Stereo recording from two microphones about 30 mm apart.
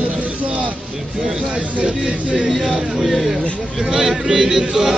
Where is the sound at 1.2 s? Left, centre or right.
Centre.